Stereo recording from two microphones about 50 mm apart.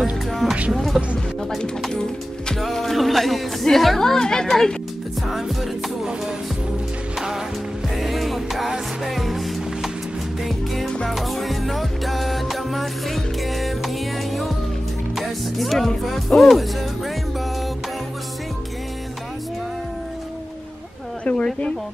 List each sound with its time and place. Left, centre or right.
0.3 s music: centre
2.6 s music: centre
3.6 s a woman's voice: centre
7.2 s music: centre
16.1 s speech: centre
21.2 s a sound: left